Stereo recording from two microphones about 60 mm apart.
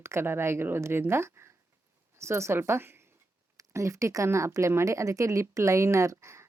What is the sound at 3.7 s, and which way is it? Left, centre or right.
A woman's voice, right.